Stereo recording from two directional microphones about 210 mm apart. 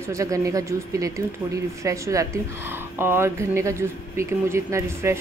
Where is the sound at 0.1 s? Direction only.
15° right (ahead or behind).